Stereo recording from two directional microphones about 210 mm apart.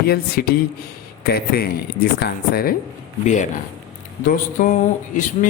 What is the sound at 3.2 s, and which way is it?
Speech, 35° left (ahead or behind).